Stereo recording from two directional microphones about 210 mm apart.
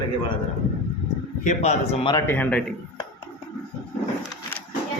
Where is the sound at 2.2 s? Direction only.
10° left (ahead or behind).